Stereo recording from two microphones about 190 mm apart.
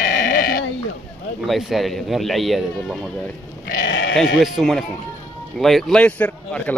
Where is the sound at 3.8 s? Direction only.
65° left (ahead or behind).